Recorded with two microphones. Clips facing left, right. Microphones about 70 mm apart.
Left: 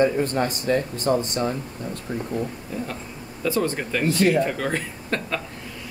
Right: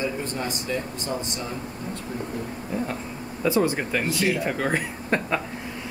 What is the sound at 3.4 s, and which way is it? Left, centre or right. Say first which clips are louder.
Speech: right 1 dB; centre.